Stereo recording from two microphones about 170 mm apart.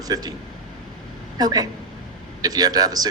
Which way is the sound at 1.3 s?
20° right (ahead or behind).